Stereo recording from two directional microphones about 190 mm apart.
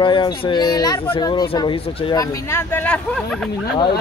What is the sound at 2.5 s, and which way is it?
Speech, 10° left (ahead or behind).